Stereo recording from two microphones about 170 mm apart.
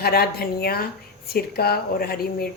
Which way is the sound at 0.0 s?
65° left (ahead or behind).